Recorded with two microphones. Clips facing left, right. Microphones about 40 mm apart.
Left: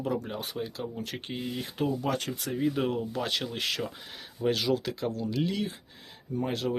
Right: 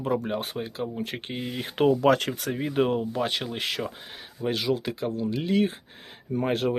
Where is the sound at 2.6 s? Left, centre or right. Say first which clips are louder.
Right 3 dB; right.